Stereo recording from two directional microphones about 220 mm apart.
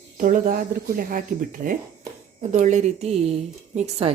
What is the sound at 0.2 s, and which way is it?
A woman's voice, 40° right (ahead or behind).